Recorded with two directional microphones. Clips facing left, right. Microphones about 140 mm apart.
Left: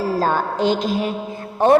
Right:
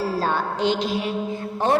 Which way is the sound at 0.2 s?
45° left (ahead or behind).